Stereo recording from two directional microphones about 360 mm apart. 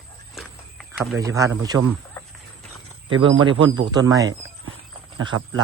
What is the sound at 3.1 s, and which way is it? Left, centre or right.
Speech, centre.